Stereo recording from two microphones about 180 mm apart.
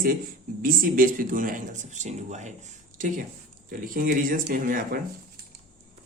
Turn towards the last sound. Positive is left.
turn(degrees=-50)  # may be behind; listen again after turning